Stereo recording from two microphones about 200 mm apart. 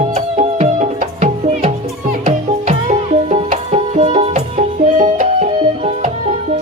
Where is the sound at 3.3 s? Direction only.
35° right (ahead or behind).